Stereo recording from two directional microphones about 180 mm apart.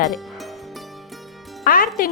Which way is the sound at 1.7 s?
50° left (ahead or behind).